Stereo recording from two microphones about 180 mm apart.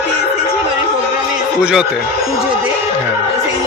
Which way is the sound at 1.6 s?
5° right (ahead or behind).